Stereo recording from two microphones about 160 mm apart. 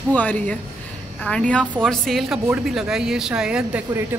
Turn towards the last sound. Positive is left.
turn(degrees=-5)  # may be behind; listen again after turning